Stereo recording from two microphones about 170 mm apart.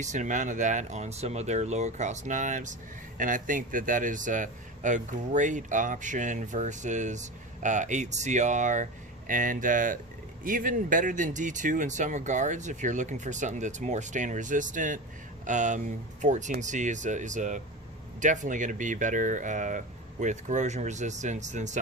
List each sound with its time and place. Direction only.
0.0 s speech: 45° right (ahead or behind)